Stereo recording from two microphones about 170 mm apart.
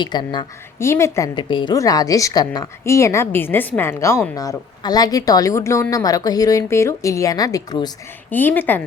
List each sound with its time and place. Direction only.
0.0 s a woman's voice: 25° left (ahead or behind)
8.3 s a woman's voice: 10° left (ahead or behind)